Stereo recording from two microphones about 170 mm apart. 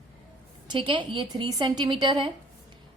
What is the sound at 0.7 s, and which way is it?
A woman's voice, 30° right (ahead or behind).